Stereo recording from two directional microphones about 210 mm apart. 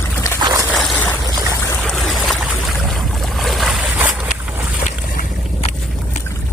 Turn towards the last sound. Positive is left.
turn(degrees=35)  # may be behind; listen again after turning